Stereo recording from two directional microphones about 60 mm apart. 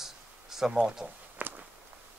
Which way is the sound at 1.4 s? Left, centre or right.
Right.